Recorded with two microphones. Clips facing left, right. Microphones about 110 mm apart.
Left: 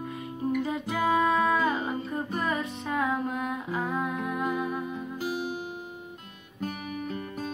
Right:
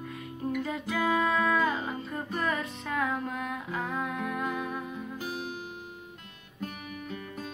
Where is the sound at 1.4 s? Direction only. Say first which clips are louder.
Left 2 dB; 5° left (ahead or behind).